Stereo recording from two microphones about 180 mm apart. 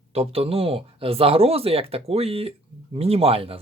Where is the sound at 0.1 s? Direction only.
35° right (ahead or behind).